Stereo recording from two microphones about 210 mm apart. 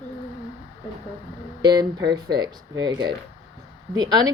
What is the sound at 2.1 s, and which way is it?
Speech, 20° right (ahead or behind).